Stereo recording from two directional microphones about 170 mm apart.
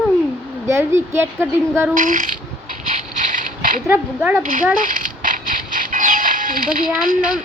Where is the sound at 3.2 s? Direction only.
50° right (ahead or behind).